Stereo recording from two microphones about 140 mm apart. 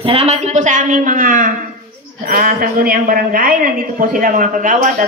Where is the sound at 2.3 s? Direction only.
85° right; by 5.0 s 65° right (ahead or behind).